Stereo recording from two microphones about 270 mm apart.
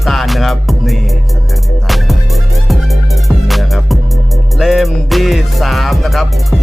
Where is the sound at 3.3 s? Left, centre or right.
Centre.